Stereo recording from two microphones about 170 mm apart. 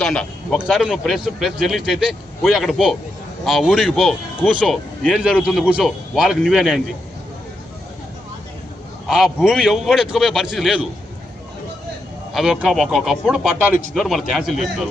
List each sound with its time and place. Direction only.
0.0 s speech: 5° left (ahead or behind)
9.0 s speech: centre (ahead or behind)
12.3 s speech: 5° right (ahead or behind)